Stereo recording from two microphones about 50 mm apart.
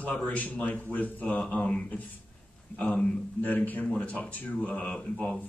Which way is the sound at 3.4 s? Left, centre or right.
Left.